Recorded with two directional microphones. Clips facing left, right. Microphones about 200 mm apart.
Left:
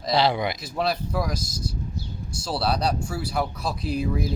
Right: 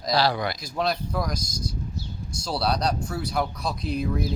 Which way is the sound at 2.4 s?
5° left (ahead or behind).